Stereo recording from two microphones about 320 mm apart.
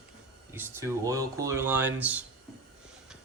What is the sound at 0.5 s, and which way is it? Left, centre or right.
A man's voice, centre.